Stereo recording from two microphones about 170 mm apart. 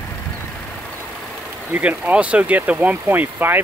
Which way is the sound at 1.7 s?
10° right (ahead or behind).